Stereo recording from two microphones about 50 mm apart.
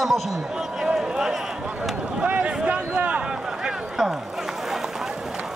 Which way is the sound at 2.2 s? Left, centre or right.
Right.